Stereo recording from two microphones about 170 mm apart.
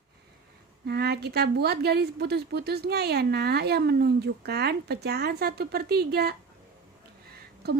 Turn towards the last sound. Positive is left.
turn(degrees=-70)  # may be behind; listen again after turning